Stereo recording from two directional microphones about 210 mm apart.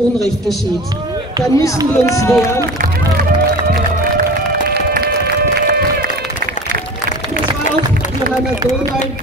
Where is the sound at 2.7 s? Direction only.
40° right (ahead or behind).